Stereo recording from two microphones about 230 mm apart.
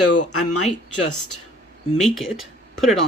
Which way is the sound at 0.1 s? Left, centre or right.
Left.